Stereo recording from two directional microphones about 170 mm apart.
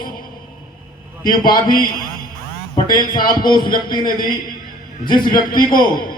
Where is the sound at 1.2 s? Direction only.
55° left (ahead or behind).